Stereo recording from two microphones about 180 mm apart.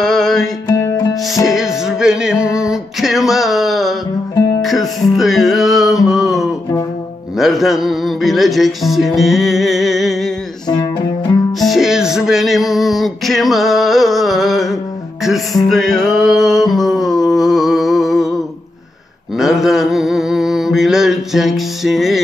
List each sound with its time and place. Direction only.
0.0 s music: 5° left (ahead or behind)
10.7 s music: 20° left (ahead or behind)
11.6 s music: centre (ahead or behind)
19.3 s mantra: centre (ahead or behind)